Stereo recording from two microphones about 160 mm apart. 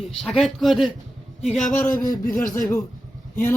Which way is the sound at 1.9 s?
60° left (ahead or behind).